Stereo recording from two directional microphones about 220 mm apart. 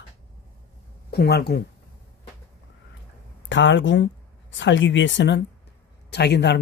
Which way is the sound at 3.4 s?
55° left (ahead or behind).